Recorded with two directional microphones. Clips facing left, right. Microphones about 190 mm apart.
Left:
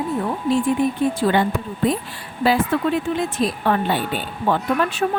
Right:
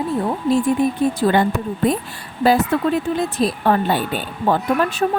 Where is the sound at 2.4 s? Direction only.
40° right (ahead or behind).